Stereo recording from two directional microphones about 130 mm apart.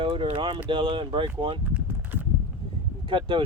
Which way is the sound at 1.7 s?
15° right (ahead or behind).